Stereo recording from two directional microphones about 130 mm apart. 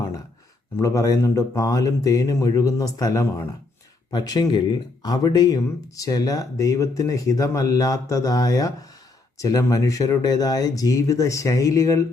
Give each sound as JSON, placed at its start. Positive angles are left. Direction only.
{"t": 0.8, "sound": "speech", "side_deg": 25}